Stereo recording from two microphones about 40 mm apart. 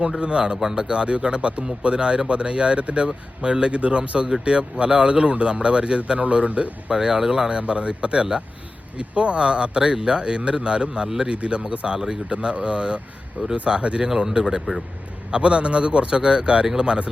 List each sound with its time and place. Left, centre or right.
0.2 s speech: right